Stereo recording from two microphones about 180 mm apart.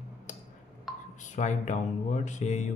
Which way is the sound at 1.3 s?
40° left (ahead or behind).